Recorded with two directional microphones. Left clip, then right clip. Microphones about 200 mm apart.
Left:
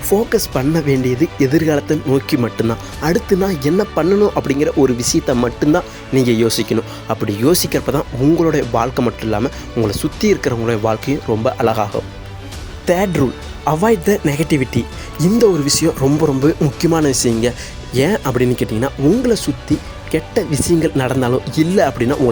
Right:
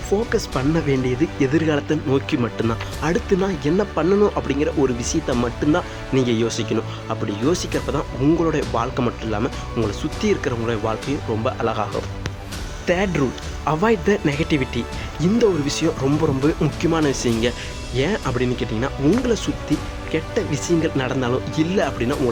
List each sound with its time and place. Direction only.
0.1 s speech: 25° left (ahead or behind)